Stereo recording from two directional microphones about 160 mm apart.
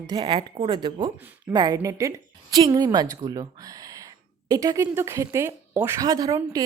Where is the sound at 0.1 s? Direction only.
30° right (ahead or behind).